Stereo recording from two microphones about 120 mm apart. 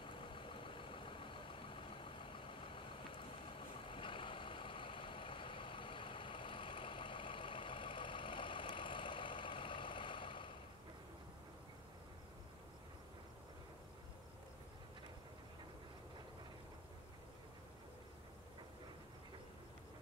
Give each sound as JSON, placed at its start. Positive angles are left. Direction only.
{"t": 0.0, "sound": "vehicle", "side_deg": 45}